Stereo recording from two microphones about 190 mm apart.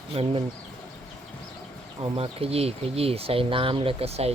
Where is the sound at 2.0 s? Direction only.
30° right (ahead or behind).